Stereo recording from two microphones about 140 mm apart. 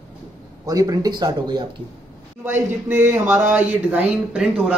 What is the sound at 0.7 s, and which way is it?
Speech, 25° right (ahead or behind).